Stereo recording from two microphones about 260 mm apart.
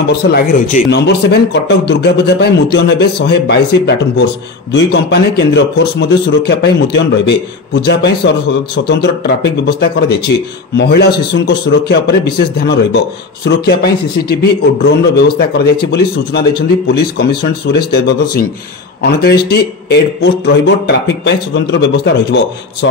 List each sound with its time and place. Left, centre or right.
0.3 s a man's voice: left